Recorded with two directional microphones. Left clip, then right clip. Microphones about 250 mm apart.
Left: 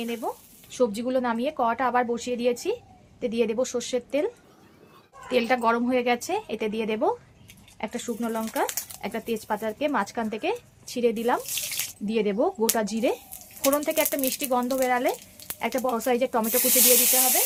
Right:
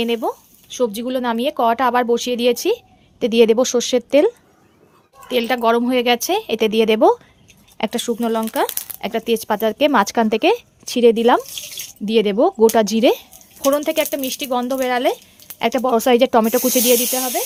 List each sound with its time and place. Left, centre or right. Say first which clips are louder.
0.0 s a woman's voice: right 11 dB; right
0.7 s a woman's voice: right 4 dB; right
5.3 s a woman's voice: right 6 dB; right